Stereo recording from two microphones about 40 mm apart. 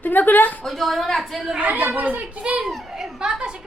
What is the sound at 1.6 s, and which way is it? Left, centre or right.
Speech, right.